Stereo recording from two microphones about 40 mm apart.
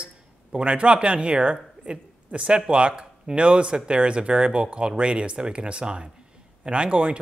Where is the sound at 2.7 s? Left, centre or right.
Right.